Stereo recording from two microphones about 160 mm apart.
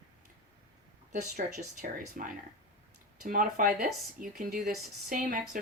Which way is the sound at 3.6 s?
60° right (ahead or behind).